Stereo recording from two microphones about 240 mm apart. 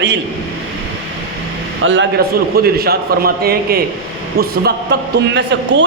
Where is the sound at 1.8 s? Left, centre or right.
Right.